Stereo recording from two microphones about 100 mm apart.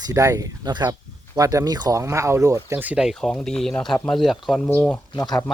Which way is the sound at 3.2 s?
5° left (ahead or behind).